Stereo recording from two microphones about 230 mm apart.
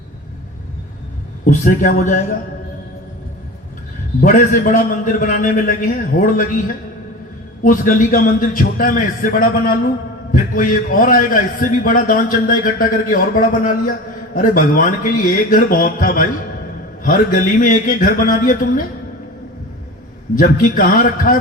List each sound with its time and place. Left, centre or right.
1.5 s a man's voice: left
4.2 s a man's voice: left
7.6 s a man's voice: left
20.3 s a man's voice: left